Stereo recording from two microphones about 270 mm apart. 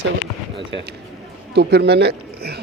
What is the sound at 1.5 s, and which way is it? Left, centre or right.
Speech, right.